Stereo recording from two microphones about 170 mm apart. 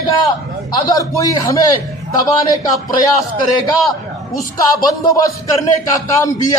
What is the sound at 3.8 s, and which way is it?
Speech, centre (ahead or behind).